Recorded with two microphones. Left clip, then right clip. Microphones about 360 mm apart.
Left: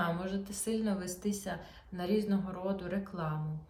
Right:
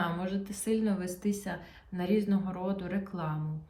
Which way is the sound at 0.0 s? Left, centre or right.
Centre.